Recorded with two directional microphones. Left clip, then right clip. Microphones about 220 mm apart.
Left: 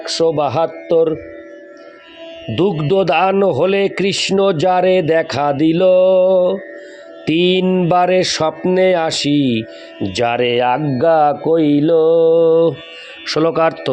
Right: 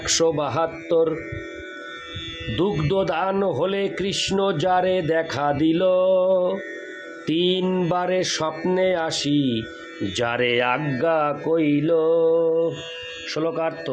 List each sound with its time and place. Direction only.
0.0 s speech: 15° left (ahead or behind)
0.3 s mantra: 30° left (ahead or behind)
2.6 s speech: 30° left (ahead or behind)
7.3 s mantra: 30° left (ahead or behind)
10.1 s speech: 25° left (ahead or behind)
12.5 s speech: 45° left (ahead or behind)